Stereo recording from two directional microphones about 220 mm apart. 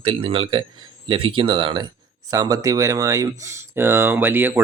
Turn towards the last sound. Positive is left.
turn(degrees=-10)  # may be behind; listen again after turning